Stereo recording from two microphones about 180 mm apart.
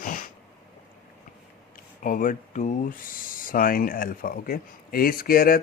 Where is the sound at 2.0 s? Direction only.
50° left (ahead or behind).